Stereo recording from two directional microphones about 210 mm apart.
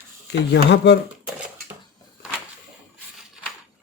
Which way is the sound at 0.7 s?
55° left (ahead or behind).